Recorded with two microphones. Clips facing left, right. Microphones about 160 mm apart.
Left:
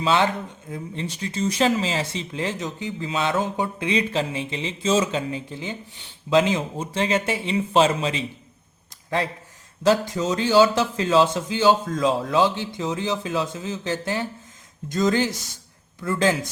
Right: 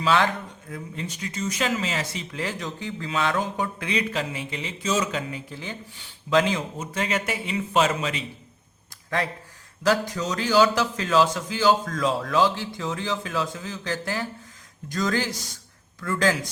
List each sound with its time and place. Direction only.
0.0 s speech: 25° left (ahead or behind)
9.8 s speech: 25° left (ahead or behind)